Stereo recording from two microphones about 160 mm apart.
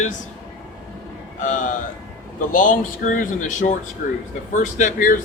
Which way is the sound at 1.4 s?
50° left (ahead or behind).